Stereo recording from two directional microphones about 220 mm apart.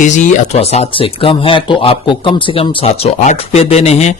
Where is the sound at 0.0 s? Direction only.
30° left (ahead or behind).